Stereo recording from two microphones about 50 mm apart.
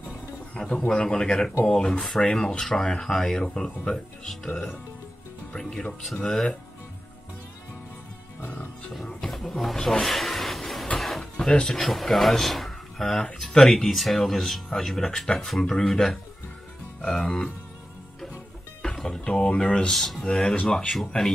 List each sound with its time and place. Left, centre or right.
0.6 s speech: left; by 4.5 s centre
5.6 s speech: centre
8.4 s roaring cats: left
9.3 s speech: centre
9.9 s a sound: centre
11.0 s music: centre
11.3 s speech: centre
19.0 s speech: centre
20.2 s speech: centre